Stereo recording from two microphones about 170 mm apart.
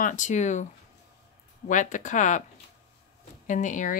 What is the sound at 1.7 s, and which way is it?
Speech, 45° left (ahead or behind).